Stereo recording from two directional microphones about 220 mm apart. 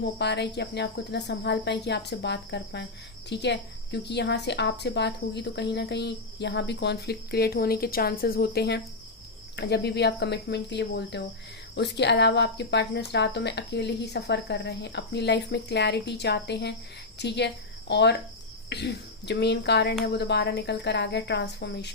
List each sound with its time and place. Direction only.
0.2 s speech: 50° left (ahead or behind)